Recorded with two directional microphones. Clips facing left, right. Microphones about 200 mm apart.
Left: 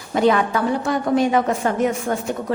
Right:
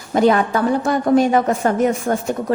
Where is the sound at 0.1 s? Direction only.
45° right (ahead or behind).